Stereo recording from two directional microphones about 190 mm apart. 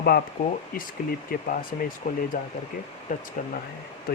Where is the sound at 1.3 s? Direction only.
50° left (ahead or behind).